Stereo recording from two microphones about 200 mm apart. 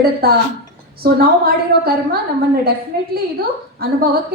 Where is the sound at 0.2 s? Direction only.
50° right (ahead or behind).